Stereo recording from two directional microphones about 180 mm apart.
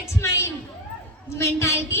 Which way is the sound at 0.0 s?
15° left (ahead or behind).